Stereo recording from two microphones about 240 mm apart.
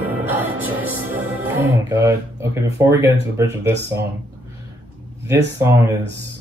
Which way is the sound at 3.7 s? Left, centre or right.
Right.